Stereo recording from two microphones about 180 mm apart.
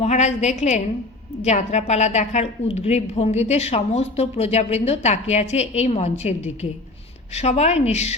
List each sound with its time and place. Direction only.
0.0 s a woman's voice: 40° left (ahead or behind)